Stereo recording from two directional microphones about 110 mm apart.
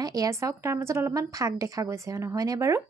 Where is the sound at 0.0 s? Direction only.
35° right (ahead or behind).